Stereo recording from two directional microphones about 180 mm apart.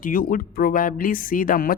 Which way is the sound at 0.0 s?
50° left (ahead or behind).